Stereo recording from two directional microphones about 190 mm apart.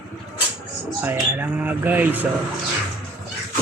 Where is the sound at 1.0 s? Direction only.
10° right (ahead or behind).